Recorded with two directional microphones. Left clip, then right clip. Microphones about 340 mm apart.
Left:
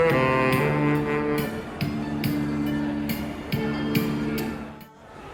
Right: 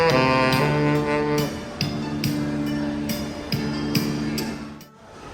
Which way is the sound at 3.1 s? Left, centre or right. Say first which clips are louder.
Right 2 dB; centre.